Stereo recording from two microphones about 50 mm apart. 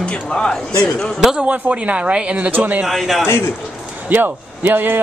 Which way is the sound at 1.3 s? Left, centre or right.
Right.